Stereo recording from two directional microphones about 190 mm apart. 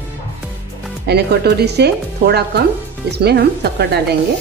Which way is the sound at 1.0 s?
60° right (ahead or behind).